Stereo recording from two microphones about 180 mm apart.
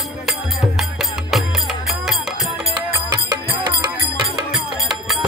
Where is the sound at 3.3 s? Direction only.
25° right (ahead or behind).